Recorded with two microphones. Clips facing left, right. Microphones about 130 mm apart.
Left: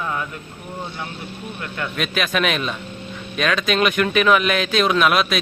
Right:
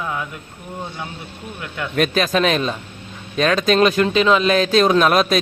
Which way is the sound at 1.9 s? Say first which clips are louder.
Right 5 dB; 40° right (ahead or behind).